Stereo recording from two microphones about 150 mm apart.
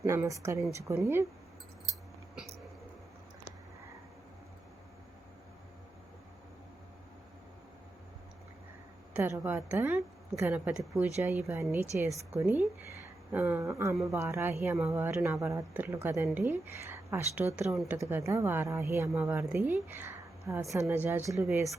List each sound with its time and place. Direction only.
0.0 s a woman's voice: 20° right (ahead or behind)
9.1 s a woman's voice: 15° right (ahead or behind)
17.9 s speech: 20° right (ahead or behind)